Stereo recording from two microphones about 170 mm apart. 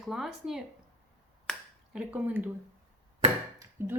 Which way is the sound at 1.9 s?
10° right (ahead or behind).